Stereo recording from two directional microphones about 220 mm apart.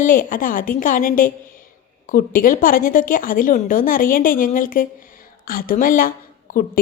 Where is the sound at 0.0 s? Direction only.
40° left (ahead or behind).